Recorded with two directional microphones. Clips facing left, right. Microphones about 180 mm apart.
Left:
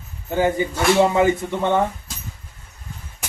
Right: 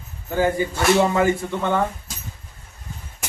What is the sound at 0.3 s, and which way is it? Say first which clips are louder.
Speech: left 1 dB; 20° left (ahead or behind).